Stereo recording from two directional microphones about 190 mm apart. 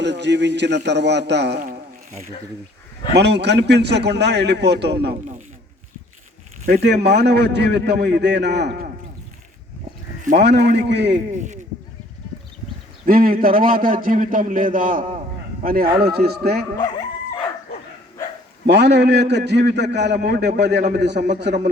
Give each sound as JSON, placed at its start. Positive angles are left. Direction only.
{"t": 0.0, "sound": "a man's voice", "side_deg": -65}
{"t": 3.2, "sound": "a man's voice", "side_deg": -65}
{"t": 6.7, "sound": "a man's voice", "side_deg": -55}
{"t": 10.3, "sound": "a man's voice", "side_deg": -65}
{"t": 13.1, "sound": "a man's voice", "side_deg": -50}
{"t": 18.6, "sound": "a man's voice", "side_deg": -65}